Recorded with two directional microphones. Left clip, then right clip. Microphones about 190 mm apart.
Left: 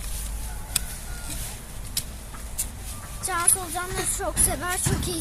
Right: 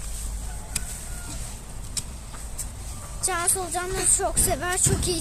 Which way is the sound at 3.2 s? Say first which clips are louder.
Even; 60° right (ahead or behind).